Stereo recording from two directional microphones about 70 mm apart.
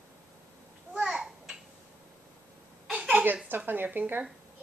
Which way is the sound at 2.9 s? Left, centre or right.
Centre.